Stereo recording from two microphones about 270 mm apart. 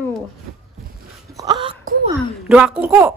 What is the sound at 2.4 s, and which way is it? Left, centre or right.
Speech, centre.